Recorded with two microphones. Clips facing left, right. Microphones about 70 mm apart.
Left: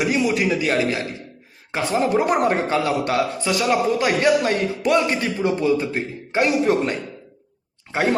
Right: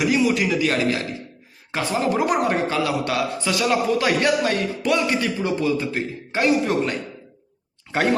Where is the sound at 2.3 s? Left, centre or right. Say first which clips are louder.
Left 2 dB; left.